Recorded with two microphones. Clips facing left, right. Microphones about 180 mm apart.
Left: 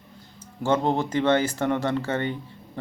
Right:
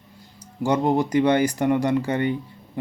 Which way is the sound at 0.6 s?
15° right (ahead or behind).